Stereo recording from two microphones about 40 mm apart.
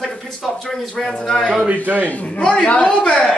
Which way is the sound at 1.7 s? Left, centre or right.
Right.